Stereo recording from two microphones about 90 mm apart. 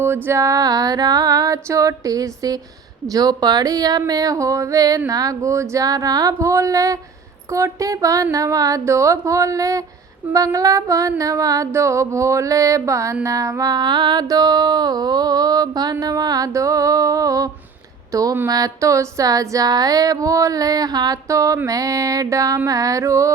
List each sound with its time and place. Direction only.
0.3 s mantra: 35° right (ahead or behind)
1.6 s speech: 35° right (ahead or behind)
13.2 s mantra: 35° right (ahead or behind)
18.1 s speech: 40° right (ahead or behind)
18.4 s mantra: 40° right (ahead or behind)
21.2 s speech: 35° right (ahead or behind)